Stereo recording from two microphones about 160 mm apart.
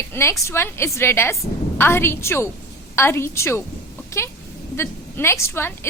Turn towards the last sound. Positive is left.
turn(degrees=15)  # may be behind; listen again after turning